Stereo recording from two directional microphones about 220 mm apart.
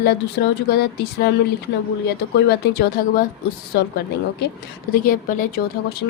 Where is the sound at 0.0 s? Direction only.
45° left (ahead or behind).